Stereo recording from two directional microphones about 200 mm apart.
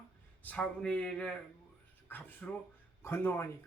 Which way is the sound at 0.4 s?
5° left (ahead or behind).